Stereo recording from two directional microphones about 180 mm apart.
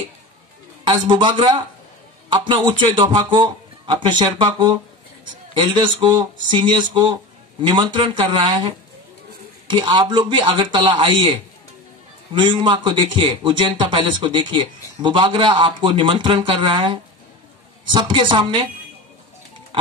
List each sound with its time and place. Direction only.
0.8 s a man's voice: 30° right (ahead or behind)
12.4 s a man's voice: 25° right (ahead or behind)
19.7 s music: 30° right (ahead or behind)